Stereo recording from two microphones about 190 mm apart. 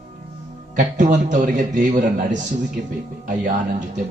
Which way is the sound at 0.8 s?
40° right (ahead or behind).